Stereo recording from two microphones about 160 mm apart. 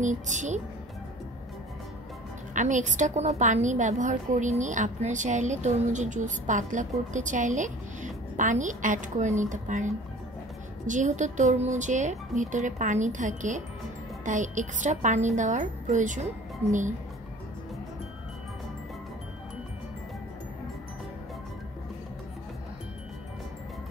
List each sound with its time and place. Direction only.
0.0 s a woman's voice: 50° right (ahead or behind)
2.5 s a woman's voice: 50° right (ahead or behind)